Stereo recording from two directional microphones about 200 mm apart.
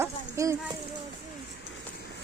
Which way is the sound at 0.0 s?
15° right (ahead or behind).